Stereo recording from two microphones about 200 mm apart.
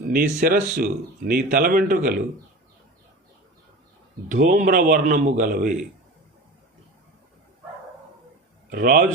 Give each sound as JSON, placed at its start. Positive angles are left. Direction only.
{"t": 0.1, "sound": "speech", "side_deg": -45}
{"t": 4.3, "sound": "speech", "side_deg": -45}
{"t": 8.7, "sound": "speech", "side_deg": -50}